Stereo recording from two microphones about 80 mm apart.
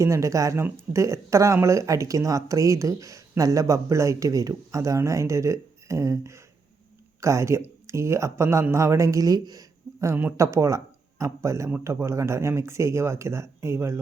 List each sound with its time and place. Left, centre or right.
0.0 s speech: right
10.1 s speech: right
10.3 s speech: right